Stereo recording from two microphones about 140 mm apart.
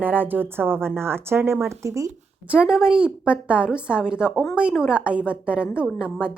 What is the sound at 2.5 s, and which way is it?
Speech, 5° right (ahead or behind).